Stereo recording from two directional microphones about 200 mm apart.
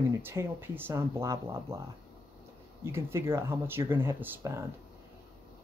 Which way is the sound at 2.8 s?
15° right (ahead or behind).